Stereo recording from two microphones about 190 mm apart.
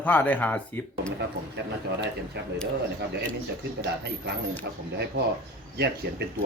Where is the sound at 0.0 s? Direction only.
10° left (ahead or behind).